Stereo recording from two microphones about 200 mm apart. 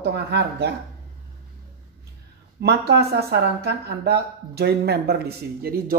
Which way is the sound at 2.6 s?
55° right (ahead or behind).